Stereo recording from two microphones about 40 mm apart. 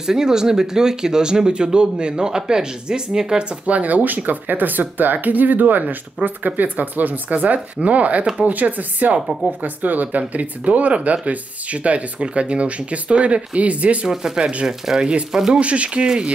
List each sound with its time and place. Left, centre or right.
0.0 s speech: centre
3.6 s speech: right
14.0 s speech: centre
15.6 s speech: right